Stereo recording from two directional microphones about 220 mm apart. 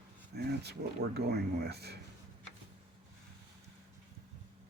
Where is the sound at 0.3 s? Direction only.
45° right (ahead or behind).